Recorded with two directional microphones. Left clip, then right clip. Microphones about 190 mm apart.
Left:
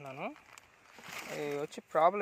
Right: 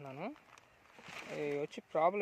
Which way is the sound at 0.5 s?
50° left (ahead or behind).